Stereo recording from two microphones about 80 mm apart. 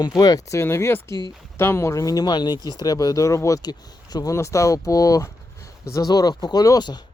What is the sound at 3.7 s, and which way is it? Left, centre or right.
Speech, left.